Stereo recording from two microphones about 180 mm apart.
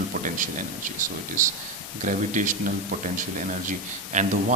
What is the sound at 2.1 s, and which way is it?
Speech, 45° right (ahead or behind).